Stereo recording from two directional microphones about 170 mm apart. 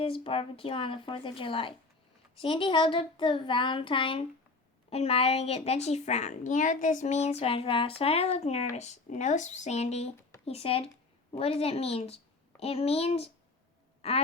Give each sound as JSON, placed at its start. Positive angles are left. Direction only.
{"t": 0.0, "sound": "a woman's voice", "side_deg": 35}